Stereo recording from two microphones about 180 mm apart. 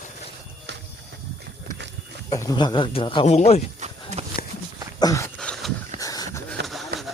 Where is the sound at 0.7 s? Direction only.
80° right.